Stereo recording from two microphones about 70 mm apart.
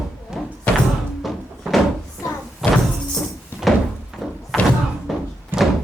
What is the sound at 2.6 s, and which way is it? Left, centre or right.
Music, centre.